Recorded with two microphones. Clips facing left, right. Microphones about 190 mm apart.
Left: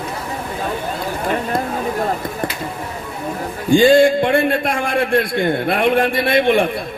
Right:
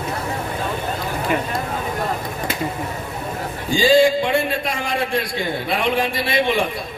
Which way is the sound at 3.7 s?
55° left (ahead or behind).